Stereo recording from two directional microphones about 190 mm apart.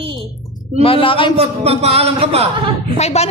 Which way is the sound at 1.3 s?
30° right (ahead or behind).